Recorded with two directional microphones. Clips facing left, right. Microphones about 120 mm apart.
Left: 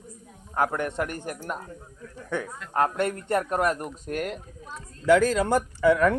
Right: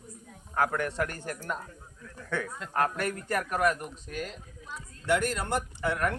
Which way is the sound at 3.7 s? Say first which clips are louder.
Left 6 dB; 45° left (ahead or behind).